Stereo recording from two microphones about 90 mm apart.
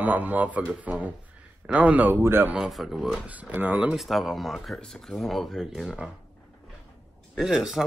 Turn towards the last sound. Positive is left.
turn(degrees=-5)  # may be behind; listen again after turning